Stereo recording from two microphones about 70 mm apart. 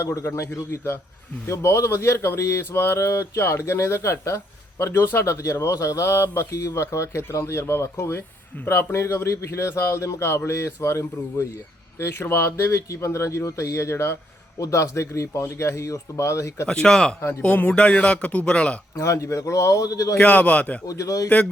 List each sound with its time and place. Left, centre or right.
0.0 s speech: left
16.6 s speech: centre
18.9 s speech: left
20.1 s speech: centre
20.8 s speech: left